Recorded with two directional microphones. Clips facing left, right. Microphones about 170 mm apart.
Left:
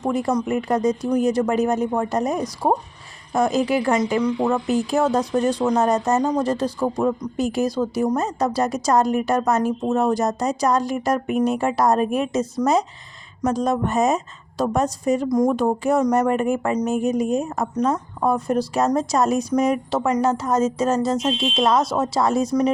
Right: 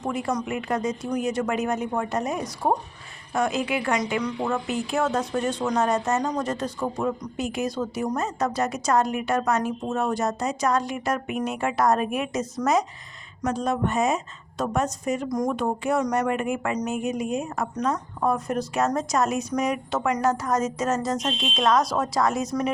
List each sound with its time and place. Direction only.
0.0 s speech: 40° left (ahead or behind)
15.5 s speech: 40° left (ahead or behind)
20.1 s a woman's voice: 25° left (ahead or behind)